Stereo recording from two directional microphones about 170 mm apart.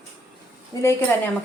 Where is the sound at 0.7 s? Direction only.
20° left (ahead or behind).